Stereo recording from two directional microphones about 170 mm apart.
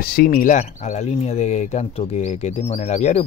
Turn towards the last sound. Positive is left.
turn(degrees=40)  # may be behind; listen again after turning